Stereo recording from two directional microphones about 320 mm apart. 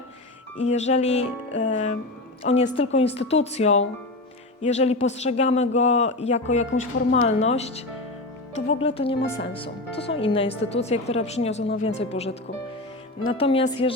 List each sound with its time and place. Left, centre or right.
0.6 s a woman's voice: left
9.9 s speech: left
10.2 s a woman's voice: centre